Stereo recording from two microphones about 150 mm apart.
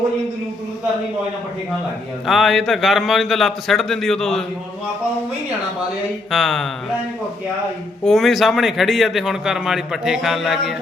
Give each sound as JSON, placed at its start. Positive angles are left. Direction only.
{"t": 2.2, "sound": "a man's voice", "side_deg": 0}
{"t": 6.3, "sound": "a man's voice", "side_deg": 0}
{"t": 8.0, "sound": "a man's voice", "side_deg": 0}